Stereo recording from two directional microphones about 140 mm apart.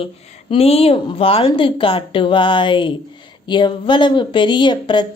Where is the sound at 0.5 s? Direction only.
45° left (ahead or behind).